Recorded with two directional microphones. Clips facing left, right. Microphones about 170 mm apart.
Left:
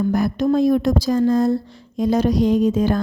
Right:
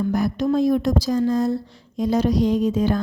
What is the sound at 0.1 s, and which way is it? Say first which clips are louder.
A woman's voice: left 2 dB; 50° left (ahead or behind).